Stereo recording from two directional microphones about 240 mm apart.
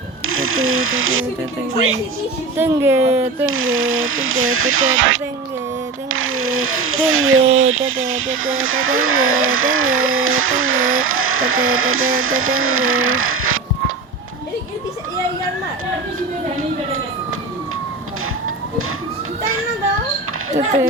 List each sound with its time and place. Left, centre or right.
0.3 s speech: right
2.6 s speech: centre
3.4 s speech: right
20.5 s a sound: right